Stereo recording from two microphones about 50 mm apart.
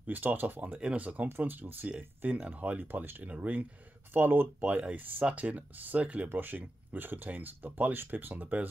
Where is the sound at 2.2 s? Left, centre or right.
Right.